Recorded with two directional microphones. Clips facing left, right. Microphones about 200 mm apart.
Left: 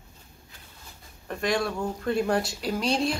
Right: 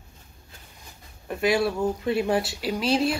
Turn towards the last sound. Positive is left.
turn(degrees=-5)  # may be behind; listen again after turning